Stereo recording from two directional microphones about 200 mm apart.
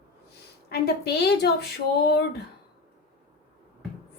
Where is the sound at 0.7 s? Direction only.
55° left (ahead or behind).